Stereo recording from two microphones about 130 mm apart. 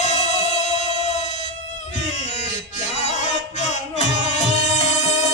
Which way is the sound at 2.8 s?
60° left (ahead or behind).